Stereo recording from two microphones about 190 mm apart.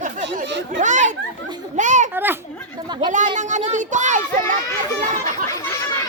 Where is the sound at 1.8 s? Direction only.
40° right (ahead or behind).